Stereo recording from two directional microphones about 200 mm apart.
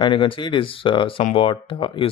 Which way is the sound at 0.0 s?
25° left (ahead or behind).